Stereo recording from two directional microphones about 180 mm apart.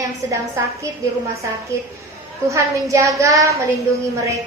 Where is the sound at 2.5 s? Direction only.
15° right (ahead or behind).